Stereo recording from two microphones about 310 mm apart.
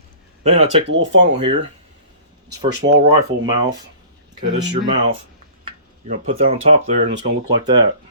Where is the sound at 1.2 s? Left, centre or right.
Centre.